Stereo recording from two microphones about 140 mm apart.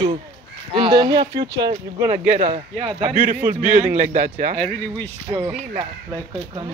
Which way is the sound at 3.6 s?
60° right (ahead or behind).